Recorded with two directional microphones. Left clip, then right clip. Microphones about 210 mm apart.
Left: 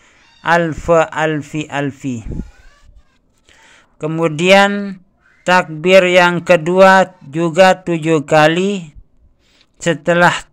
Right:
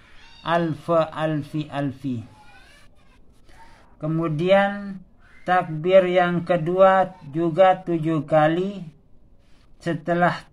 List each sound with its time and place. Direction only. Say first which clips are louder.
0.4 s speech: left 9 dB; 30° left (ahead or behind)
4.0 s speech: left 9 dB; 45° left (ahead or behind)
9.8 s speech: left 10 dB; 50° left (ahead or behind)